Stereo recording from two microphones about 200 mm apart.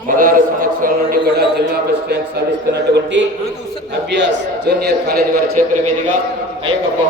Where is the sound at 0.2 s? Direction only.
45° right (ahead or behind).